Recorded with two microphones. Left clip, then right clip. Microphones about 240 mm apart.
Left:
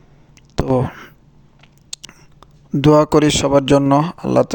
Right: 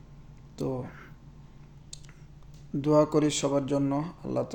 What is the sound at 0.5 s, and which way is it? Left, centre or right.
Speech, left.